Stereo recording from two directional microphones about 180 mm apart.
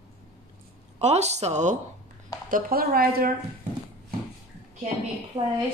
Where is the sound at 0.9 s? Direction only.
35° right (ahead or behind).